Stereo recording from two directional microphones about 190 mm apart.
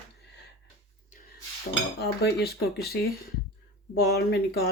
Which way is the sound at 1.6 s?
55° left (ahead or behind).